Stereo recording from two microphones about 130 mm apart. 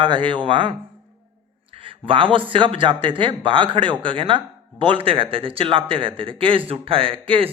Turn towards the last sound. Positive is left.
turn(degrees=-45)  # may be behind; listen again after turning